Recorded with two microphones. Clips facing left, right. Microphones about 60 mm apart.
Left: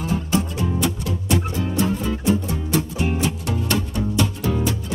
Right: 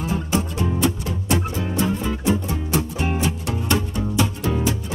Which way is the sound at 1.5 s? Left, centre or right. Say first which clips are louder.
Left 1 dB; centre.